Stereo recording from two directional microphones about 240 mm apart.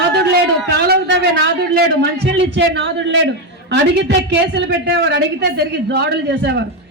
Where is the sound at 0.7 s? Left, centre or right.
Right.